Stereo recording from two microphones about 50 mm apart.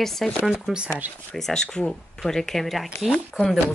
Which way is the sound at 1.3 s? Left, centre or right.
Centre.